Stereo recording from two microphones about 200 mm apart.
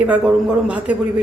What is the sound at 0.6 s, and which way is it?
Speech, 5° right (ahead or behind).